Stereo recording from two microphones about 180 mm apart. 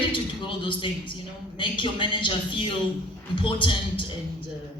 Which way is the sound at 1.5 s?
30° left (ahead or behind).